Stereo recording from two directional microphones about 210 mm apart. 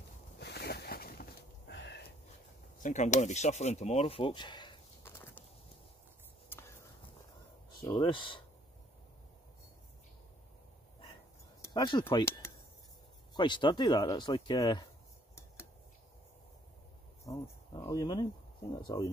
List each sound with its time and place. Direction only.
0.4 s a sound: 50° left (ahead or behind)
1.7 s sniff: 55° left (ahead or behind)
2.8 s speech: 35° left (ahead or behind); by 5.4 s 10° left (ahead or behind)
7.8 s speech: 25° left (ahead or behind)
11.6 s speech: 20° left (ahead or behind)
17.3 s speech: 15° left (ahead or behind)